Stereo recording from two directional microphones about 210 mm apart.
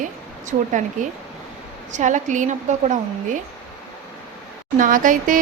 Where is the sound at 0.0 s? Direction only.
35° right (ahead or behind).